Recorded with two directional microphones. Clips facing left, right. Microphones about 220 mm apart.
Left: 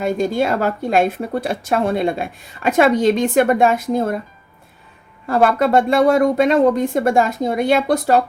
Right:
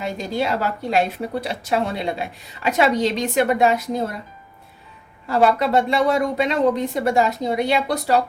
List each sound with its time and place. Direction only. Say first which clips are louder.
0.0 s a woman's voice: left 6 dB; 50° left (ahead or behind)
5.2 s a woman's voice: left 2 dB; 50° left (ahead or behind)